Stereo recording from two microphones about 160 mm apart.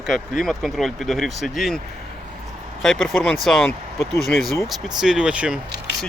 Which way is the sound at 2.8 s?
Centre (ahead or behind).